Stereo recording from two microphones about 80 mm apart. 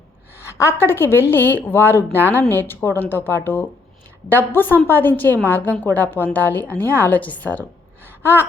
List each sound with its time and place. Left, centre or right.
0.3 s a woman's voice: left